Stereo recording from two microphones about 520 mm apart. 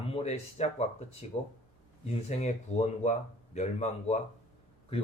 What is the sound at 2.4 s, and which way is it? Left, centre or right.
Speech, centre.